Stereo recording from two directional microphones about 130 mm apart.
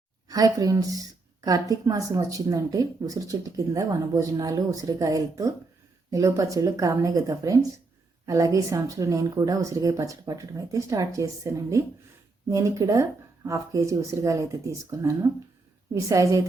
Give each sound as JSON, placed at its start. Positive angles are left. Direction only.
{"t": 0.3, "sound": "a woman's voice", "side_deg": -30}